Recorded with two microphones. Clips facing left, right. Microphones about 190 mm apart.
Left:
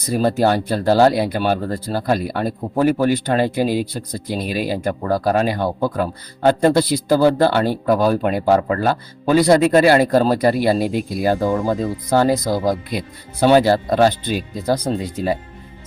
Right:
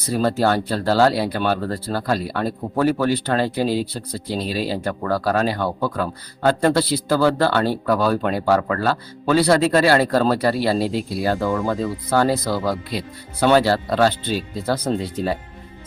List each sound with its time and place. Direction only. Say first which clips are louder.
0.1 s speech: left 2 dB; 15° left (ahead or behind)